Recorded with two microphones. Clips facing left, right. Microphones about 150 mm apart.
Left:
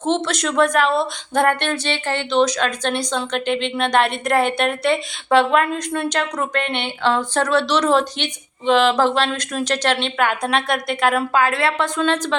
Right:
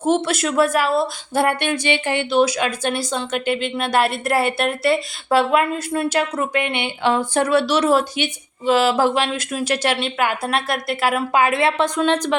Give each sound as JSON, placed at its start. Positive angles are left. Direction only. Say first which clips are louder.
{"t": 0.0, "sound": "a woman's voice", "louder": "right 2 dB", "side_deg": -10}
{"t": 11.3, "sound": "a woman's voice", "louder": "right 1 dB", "side_deg": -20}